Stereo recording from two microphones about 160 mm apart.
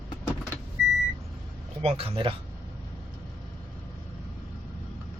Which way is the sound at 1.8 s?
35° right (ahead or behind).